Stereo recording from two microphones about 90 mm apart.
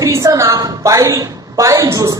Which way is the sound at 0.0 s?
35° right (ahead or behind).